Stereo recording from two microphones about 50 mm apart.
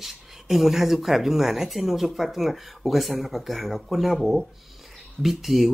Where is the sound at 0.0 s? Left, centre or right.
Centre.